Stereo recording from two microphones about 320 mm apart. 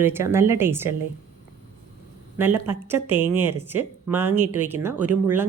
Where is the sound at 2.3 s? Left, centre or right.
Centre.